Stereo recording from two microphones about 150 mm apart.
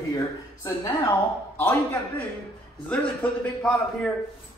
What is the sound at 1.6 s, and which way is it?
A man's voice, 15° left (ahead or behind).